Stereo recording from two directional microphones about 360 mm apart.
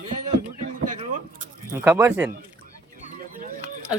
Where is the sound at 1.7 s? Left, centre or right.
Centre.